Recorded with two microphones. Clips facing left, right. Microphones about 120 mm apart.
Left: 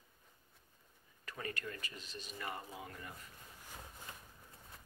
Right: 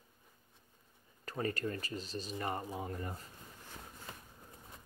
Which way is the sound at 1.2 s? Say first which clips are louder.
Right 8 dB; 35° right (ahead or behind).